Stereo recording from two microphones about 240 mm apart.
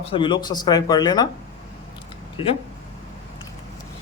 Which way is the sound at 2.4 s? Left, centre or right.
Left.